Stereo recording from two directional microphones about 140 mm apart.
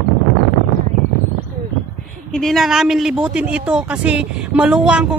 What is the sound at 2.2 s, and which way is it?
A woman's voice, centre (ahead or behind).